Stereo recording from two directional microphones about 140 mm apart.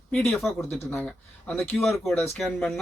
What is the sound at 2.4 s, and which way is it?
Speech, 5° left (ahead or behind).